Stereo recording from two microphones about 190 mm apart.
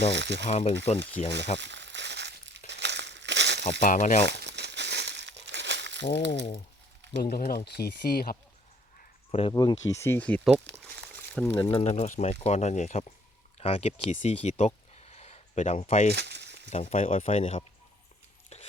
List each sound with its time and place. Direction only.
0.1 s speech: 65° right (ahead or behind)
0.4 s speech: 35° left (ahead or behind)
1.5 s crumpling: 70° right (ahead or behind)
3.6 s speech: 40° left (ahead or behind)
4.3 s crumpling: 65° right (ahead or behind)
7.2 s speech: 50° left (ahead or behind)
9.3 s speech: 25° left (ahead or behind)
11.7 s speech: 35° left (ahead or behind)
16.1 s a sound: 65° right (ahead or behind)
16.6 s speech: 40° left (ahead or behind)